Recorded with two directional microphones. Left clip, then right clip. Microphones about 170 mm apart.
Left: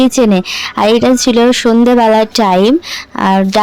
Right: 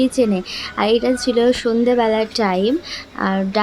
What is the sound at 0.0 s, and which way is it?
Speech, 55° left (ahead or behind).